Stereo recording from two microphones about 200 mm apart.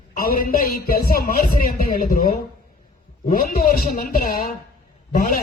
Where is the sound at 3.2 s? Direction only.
45° left (ahead or behind).